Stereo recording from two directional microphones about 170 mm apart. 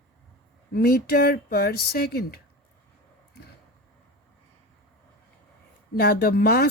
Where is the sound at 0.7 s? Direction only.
60° left (ahead or behind).